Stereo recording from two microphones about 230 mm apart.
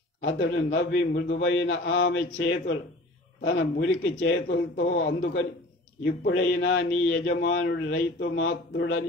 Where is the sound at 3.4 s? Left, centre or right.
Left.